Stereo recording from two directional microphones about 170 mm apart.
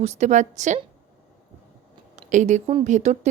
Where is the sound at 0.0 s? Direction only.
40° right (ahead or behind).